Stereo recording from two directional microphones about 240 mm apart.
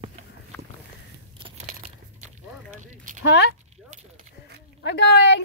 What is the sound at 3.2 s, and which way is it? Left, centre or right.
Speech, left.